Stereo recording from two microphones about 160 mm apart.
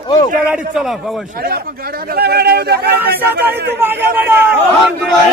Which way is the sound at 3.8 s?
15° right (ahead or behind).